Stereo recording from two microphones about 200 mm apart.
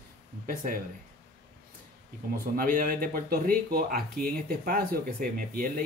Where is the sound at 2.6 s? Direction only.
45° right (ahead or behind).